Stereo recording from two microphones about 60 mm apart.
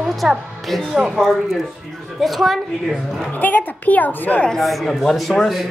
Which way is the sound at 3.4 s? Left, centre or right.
Left.